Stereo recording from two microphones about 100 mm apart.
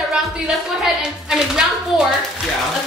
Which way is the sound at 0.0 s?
Centre (ahead or behind).